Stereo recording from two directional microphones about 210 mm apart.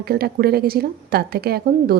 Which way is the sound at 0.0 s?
45° right (ahead or behind).